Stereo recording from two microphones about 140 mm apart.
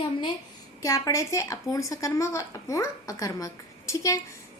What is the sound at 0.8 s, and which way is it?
A woman's voice, 25° left (ahead or behind).